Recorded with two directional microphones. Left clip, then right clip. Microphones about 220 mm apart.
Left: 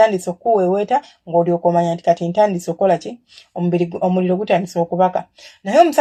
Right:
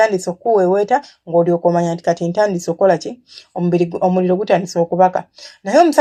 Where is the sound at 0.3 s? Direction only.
20° right (ahead or behind).